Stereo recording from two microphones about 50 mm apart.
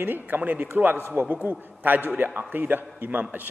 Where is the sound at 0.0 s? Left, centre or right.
Right.